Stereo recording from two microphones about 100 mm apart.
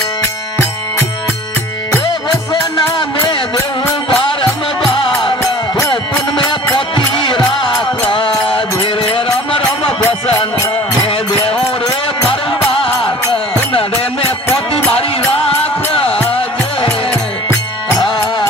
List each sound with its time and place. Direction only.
4.1 s music: 60° left (ahead or behind)
11.0 s music: 65° left (ahead or behind)